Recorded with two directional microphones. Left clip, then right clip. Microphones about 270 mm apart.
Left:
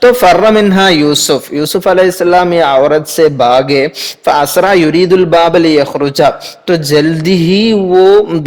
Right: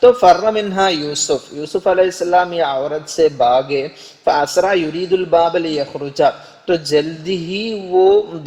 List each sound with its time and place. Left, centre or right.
0.0 s a man's voice: left